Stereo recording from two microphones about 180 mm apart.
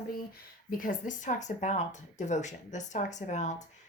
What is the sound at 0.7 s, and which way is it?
Speech, 50° left (ahead or behind).